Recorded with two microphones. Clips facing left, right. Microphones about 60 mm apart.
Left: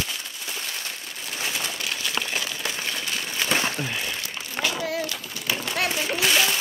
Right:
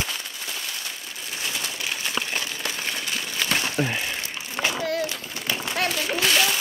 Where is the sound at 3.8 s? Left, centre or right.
Right.